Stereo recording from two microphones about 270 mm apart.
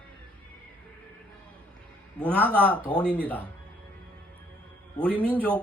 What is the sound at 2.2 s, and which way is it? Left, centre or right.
Speech, centre.